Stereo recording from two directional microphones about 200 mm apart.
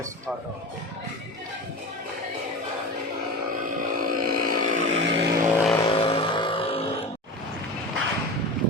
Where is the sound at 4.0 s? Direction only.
45° right (ahead or behind).